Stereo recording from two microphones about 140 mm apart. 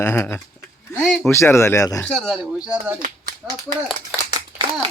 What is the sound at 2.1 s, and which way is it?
A child's voice, centre (ahead or behind).